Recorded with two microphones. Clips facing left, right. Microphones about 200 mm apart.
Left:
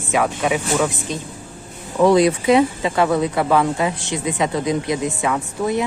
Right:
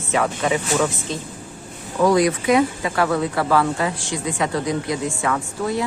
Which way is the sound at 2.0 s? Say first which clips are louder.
Left 3 dB; 25° left (ahead or behind).